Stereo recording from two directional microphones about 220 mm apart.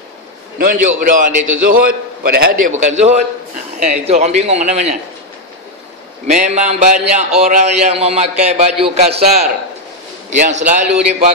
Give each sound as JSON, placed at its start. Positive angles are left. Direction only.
{"t": 0.6, "sound": "a man's voice", "side_deg": -40}
{"t": 6.2, "sound": "a man's voice", "side_deg": -30}
{"t": 10.5, "sound": "a man's voice", "side_deg": -35}